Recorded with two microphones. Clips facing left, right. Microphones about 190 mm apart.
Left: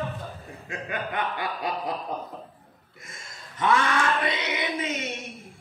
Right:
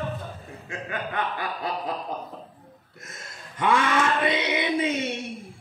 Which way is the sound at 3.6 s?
15° right (ahead or behind).